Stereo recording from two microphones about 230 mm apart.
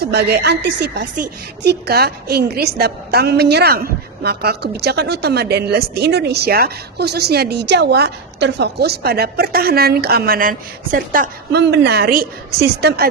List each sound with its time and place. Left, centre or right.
0.0 s a woman's voice: right